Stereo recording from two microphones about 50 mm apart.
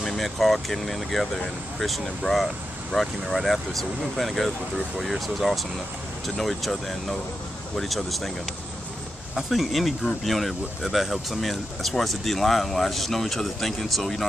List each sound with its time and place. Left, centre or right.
0.0 s speech: centre
9.3 s speech: centre